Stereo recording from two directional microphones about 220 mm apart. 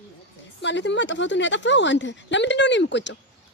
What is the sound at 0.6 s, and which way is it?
Speech, 55° left (ahead or behind).